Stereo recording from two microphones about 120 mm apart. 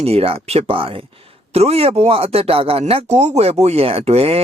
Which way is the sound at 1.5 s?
60° right (ahead or behind).